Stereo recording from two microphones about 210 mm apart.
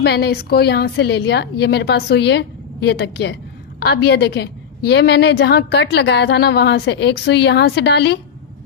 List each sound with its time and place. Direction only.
0.0 s a woman's voice: 50° left (ahead or behind)